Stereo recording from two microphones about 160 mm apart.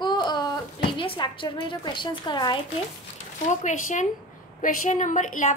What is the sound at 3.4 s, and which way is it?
A woman's voice, 50° left (ahead or behind).